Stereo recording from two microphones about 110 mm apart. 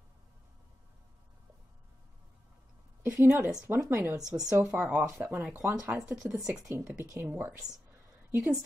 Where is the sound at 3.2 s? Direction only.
20° right (ahead or behind).